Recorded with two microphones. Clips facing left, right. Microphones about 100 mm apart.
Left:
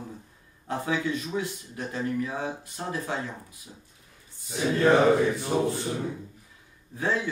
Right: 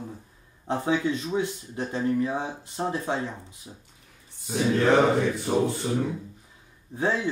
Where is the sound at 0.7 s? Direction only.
25° right (ahead or behind).